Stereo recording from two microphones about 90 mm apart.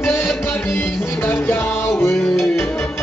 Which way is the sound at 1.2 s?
25° left (ahead or behind).